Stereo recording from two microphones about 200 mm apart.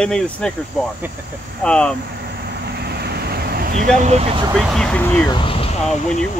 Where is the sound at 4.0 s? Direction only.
30° right (ahead or behind).